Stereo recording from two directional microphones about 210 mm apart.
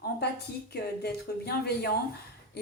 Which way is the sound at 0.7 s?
50° left (ahead or behind).